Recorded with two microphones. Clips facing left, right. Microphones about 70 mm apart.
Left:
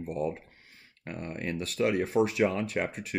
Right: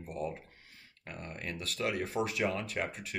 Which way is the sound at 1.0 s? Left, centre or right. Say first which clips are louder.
Left 7 dB; left.